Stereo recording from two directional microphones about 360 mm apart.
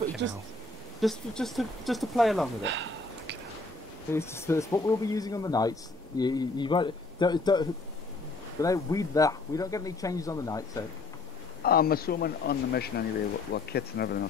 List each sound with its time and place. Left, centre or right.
1.0 s speech: centre
2.6 s a sound: right
4.1 s speech: centre
11.6 s speech: left